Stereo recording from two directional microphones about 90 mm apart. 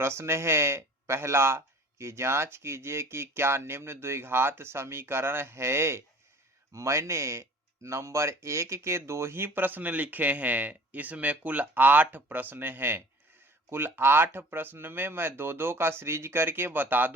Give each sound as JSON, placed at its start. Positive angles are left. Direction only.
{"t": 0.0, "sound": "speech", "side_deg": -30}